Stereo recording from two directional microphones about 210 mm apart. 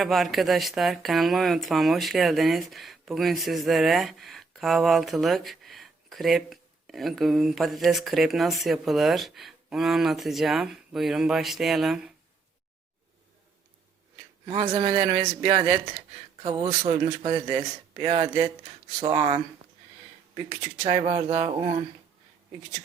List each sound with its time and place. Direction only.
0.0 s speech: centre (ahead or behind)
14.4 s speech: 20° right (ahead or behind)
20.5 s speech: 30° right (ahead or behind)